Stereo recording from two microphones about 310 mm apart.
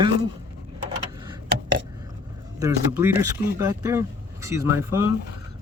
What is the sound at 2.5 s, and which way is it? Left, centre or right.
Speech, centre.